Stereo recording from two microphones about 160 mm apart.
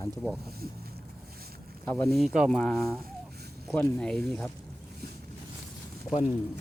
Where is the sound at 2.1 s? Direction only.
Centre (ahead or behind).